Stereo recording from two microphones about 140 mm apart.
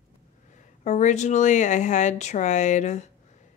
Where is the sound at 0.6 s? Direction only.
60° left (ahead or behind).